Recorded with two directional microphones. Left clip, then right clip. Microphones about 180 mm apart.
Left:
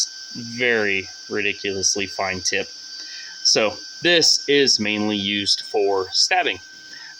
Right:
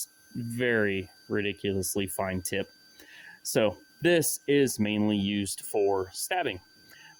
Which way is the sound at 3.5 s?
40° right (ahead or behind).